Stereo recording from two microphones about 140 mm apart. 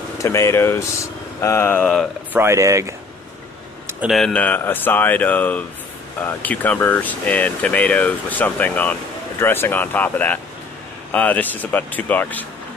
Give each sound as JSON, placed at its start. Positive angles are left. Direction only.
{"t": 0.2, "sound": "speech", "side_deg": 20}
{"t": 2.3, "sound": "speech", "side_deg": -20}
{"t": 4.1, "sound": "speech", "side_deg": 5}